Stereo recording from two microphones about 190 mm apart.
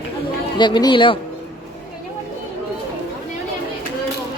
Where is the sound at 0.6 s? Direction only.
25° left (ahead or behind).